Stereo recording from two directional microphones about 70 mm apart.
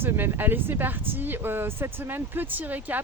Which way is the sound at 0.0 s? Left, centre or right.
Right.